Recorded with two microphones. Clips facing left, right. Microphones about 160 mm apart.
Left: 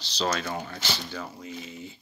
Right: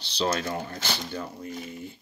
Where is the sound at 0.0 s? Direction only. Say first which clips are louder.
Right 1 dB; 55° right (ahead or behind).